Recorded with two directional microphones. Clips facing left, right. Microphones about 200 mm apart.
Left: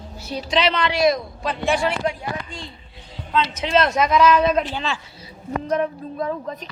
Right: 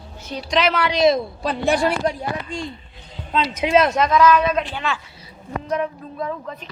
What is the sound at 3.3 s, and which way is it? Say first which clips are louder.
Speech: right 2 dB; 10° right (ahead or behind).